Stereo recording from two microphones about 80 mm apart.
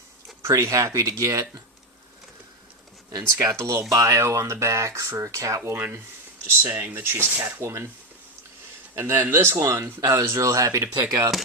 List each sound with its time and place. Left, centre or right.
0.4 s speech: right
3.1 s speech: right
5.7 s speech: right
9.0 s speech: right
11.0 s speech: right